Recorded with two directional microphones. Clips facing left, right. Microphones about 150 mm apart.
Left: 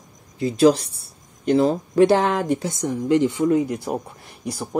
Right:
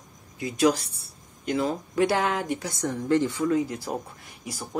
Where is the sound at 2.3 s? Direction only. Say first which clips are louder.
Left 7 dB; 45° left (ahead or behind).